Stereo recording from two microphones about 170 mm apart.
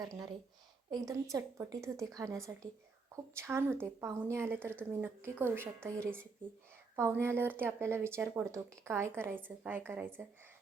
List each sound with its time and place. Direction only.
0.0 s a woman's voice: 20° right (ahead or behind)